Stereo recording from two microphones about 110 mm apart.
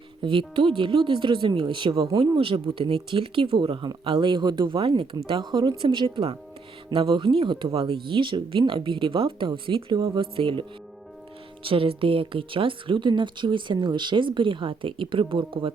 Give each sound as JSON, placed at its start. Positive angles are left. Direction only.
{"t": 0.2, "sound": "speech", "side_deg": -50}